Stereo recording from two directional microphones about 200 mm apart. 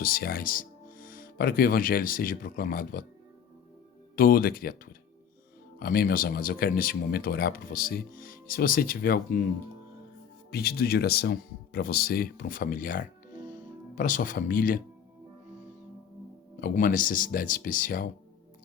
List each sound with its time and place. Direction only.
0.0 s speech: 50° left (ahead or behind)
4.1 s speech: 45° left (ahead or behind)
5.8 s speech: 45° left (ahead or behind)
10.5 s speech: 50° left (ahead or behind)
16.6 s speech: 45° left (ahead or behind)